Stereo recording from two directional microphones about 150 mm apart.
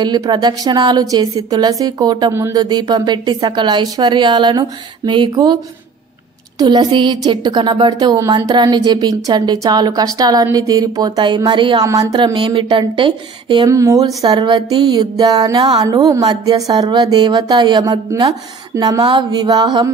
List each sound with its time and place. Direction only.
0.0 s a woman's voice: 30° right (ahead or behind)
6.6 s a woman's voice: 30° right (ahead or behind)
13.7 s a woman's voice: 20° right (ahead or behind)